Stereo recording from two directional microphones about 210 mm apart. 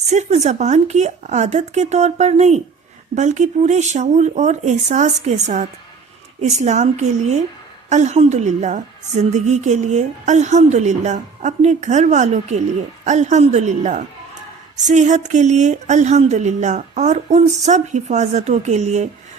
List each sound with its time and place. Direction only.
0.1 s speech: 35° right (ahead or behind)